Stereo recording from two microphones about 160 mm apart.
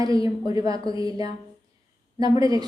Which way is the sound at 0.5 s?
25° right (ahead or behind).